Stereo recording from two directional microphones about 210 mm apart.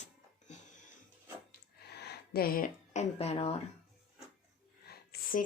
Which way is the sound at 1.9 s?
50° left (ahead or behind).